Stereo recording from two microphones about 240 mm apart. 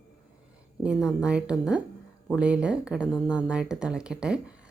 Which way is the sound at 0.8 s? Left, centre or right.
Centre.